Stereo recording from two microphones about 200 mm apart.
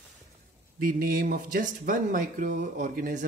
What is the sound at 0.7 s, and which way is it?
Speech, 45° right (ahead or behind).